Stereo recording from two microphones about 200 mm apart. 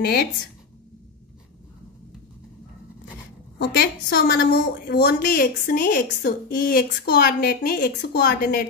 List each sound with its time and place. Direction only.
0.0 s a woman's voice: 50° left (ahead or behind)
3.5 s a woman's voice: 55° left (ahead or behind)